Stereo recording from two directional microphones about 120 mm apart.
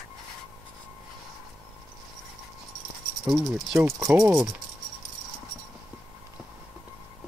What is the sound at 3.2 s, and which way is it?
Insect, 5° right (ahead or behind).